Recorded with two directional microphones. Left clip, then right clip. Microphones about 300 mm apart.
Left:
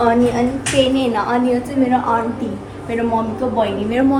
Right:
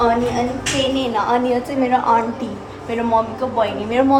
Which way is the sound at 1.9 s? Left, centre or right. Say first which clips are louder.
Right 2 dB; right.